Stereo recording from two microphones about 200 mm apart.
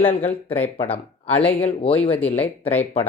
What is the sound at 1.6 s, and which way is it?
Speech, 30° left (ahead or behind).